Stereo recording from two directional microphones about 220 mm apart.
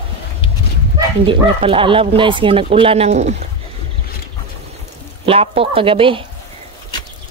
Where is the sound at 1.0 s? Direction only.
25° right (ahead or behind).